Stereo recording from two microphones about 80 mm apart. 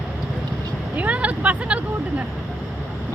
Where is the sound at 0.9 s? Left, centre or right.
Centre.